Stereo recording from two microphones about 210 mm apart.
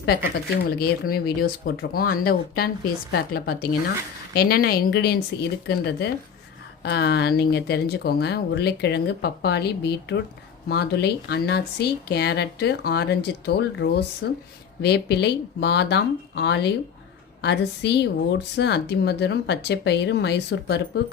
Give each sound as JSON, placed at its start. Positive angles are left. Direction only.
{"t": 0.8, "sound": "a woman's voice", "side_deg": 45}